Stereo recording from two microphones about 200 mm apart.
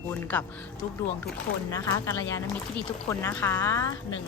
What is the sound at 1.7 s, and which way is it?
Speech, 15° left (ahead or behind).